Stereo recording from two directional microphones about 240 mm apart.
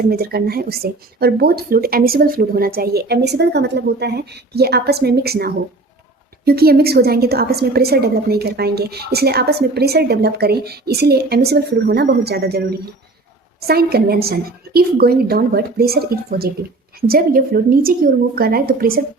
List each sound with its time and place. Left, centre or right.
0.0 s a woman's voice: right
13.7 s a woman's voice: right